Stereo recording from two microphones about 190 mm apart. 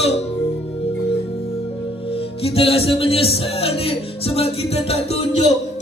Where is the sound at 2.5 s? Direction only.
30° left (ahead or behind).